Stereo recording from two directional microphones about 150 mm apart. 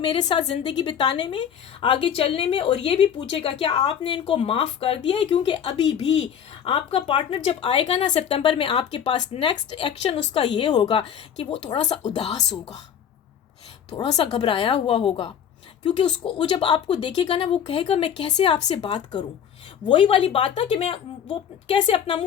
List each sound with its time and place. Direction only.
0.0 s a woman's voice: 30° left (ahead or behind)
6.7 s a woman's voice: 35° left (ahead or behind)
11.7 s speech: 50° left (ahead or behind)
13.9 s a woman's voice: 30° left (ahead or behind)